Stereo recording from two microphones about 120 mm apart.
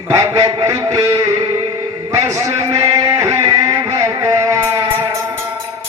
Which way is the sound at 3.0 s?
25° right (ahead or behind).